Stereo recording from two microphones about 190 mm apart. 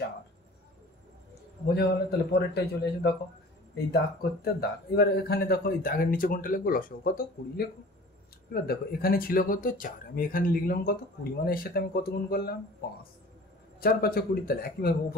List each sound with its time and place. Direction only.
1.7 s a man's voice: 60° left (ahead or behind)
8.6 s a man's voice: 50° left (ahead or behind)
13.7 s a man's voice: 50° left (ahead or behind)